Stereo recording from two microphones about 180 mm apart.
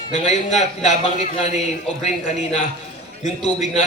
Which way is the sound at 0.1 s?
40° left (ahead or behind).